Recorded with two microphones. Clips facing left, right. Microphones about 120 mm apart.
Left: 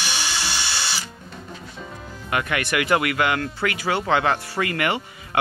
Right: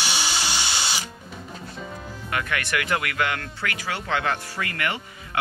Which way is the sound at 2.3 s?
15° left (ahead or behind).